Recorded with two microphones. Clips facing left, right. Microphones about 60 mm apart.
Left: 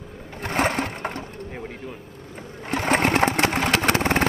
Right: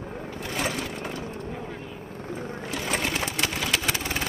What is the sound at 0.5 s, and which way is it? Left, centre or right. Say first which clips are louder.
Sewing machine: left 7 dB; left.